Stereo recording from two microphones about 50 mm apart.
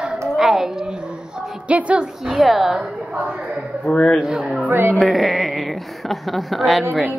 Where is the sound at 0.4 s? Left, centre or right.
Centre.